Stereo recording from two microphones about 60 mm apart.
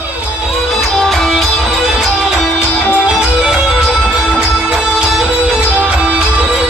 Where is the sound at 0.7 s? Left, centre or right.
Centre.